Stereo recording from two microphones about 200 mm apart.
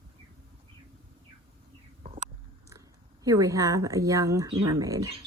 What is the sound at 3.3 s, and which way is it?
Speech, 15° right (ahead or behind).